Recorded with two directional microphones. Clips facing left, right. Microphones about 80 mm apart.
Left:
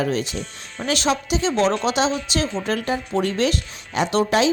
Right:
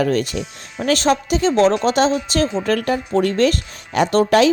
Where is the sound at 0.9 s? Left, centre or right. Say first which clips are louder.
Right 5 dB; right.